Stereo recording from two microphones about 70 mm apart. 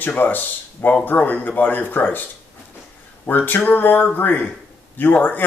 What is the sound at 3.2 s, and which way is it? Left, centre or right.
Speech, left.